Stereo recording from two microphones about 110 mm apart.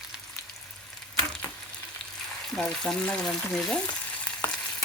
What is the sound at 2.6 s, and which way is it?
Frying, 5° left (ahead or behind).